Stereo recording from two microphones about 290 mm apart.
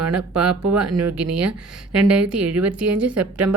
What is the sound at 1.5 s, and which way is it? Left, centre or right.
Speech, centre.